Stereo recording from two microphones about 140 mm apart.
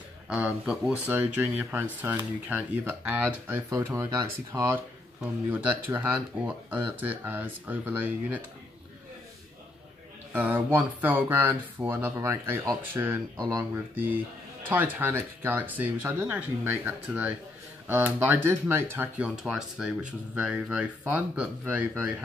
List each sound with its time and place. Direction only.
0.7 s speech: 10° right (ahead or behind)
10.3 s speech: 15° right (ahead or behind)
19.2 s speech: 5° right (ahead or behind)